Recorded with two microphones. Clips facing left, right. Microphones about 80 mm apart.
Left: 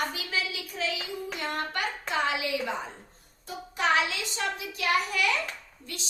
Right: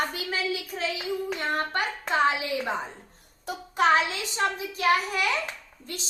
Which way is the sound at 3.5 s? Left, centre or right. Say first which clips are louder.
Right 4 dB; right.